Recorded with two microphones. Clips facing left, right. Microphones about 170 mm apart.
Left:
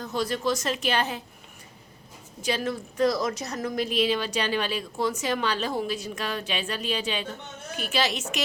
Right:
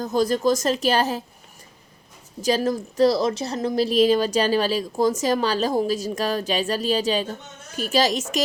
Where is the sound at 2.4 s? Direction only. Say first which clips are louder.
Right 7 dB; 40° right (ahead or behind).